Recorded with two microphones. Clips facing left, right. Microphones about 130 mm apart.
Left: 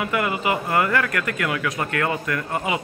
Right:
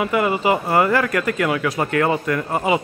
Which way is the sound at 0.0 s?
25° right (ahead or behind).